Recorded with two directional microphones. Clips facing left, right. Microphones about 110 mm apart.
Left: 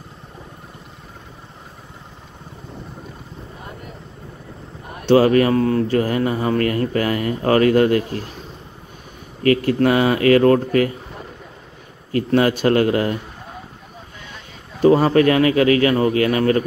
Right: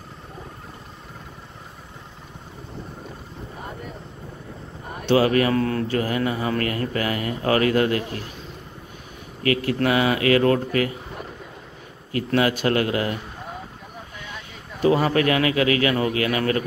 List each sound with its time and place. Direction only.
5.0 s speech: 35° left (ahead or behind)
9.4 s speech: 40° left (ahead or behind)
12.1 s speech: 35° left (ahead or behind)
14.8 s speech: 35° left (ahead or behind)